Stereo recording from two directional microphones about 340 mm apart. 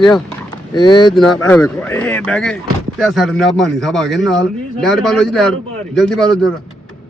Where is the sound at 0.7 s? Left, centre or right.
Centre.